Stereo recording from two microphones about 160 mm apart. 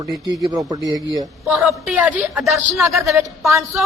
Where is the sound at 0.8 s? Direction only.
25° left (ahead or behind).